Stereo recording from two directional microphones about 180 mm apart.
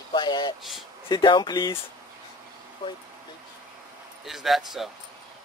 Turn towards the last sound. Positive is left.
turn(degrees=0)  # may be behind; listen again after turning